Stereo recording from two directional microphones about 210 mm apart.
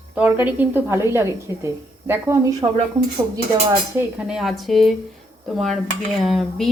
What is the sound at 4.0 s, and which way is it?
Speech, 5° right (ahead or behind).